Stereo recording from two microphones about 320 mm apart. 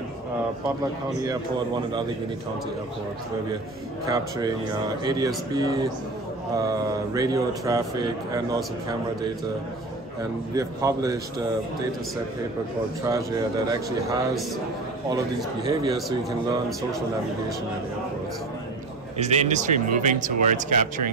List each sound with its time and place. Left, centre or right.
4.1 s a man's voice: centre
10.5 s a man's voice: centre
13.0 s a man's voice: centre
15.6 s a man's voice: centre
19.1 s speech: right